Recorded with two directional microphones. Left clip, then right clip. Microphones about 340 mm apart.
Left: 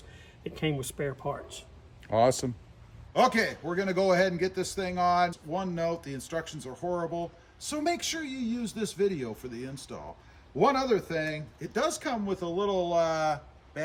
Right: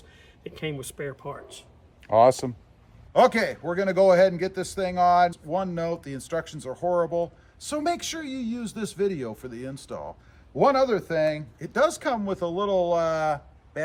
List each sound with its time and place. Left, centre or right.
0.4 s a man's voice: centre
2.0 s speech: right
3.1 s a man's voice: centre